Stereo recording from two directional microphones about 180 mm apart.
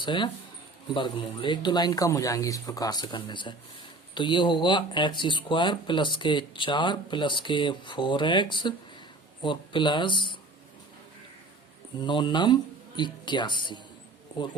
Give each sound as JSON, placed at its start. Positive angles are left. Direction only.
{"t": 0.0, "sound": "speech", "side_deg": 25}
{"t": 12.0, "sound": "speech", "side_deg": 25}